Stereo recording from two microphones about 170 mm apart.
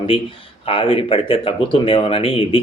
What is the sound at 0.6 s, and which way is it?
Speech, 30° left (ahead or behind).